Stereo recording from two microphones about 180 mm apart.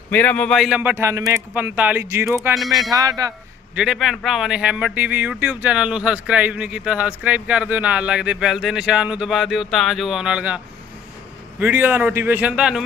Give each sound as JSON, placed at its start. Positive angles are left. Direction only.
{"t": 0.1, "sound": "speech", "side_deg": 10}
{"t": 2.6, "sound": "a man's voice", "side_deg": 0}
{"t": 2.9, "sound": "speech", "side_deg": -20}
{"t": 3.8, "sound": "a man's voice", "side_deg": 0}
{"t": 11.6, "sound": "speech", "side_deg": -10}